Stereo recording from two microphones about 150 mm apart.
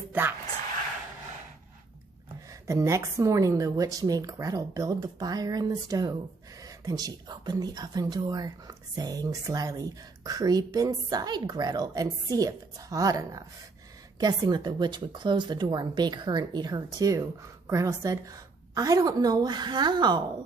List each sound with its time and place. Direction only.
2.6 s speech: 20° right (ahead or behind)